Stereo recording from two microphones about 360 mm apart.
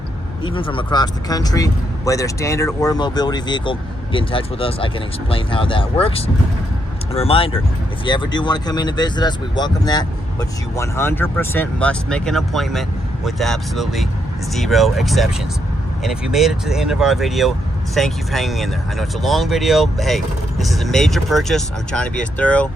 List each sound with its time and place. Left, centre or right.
0.4 s speech: centre